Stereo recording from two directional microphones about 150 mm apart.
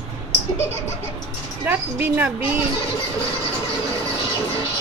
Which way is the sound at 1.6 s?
10° right (ahead or behind).